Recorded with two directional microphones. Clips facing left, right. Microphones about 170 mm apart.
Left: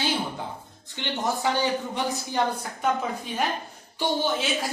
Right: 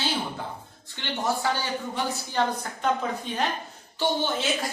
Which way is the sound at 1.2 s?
20° left (ahead or behind).